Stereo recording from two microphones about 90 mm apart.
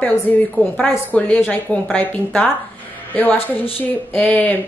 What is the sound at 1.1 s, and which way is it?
Speech, 10° left (ahead or behind).